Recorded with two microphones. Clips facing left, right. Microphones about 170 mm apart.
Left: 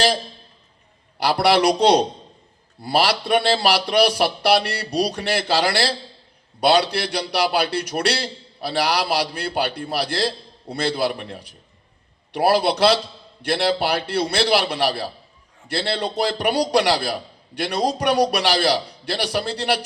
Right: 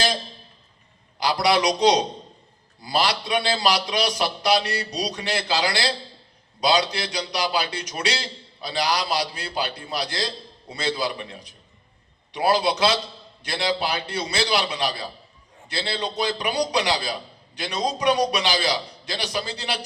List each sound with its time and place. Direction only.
1.2 s a man's voice: 65° left (ahead or behind)